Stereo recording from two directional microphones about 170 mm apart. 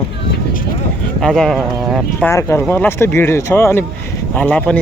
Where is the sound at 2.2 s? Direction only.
15° left (ahead or behind).